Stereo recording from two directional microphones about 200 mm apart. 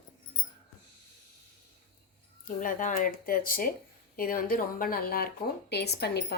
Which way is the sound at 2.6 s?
45° left (ahead or behind).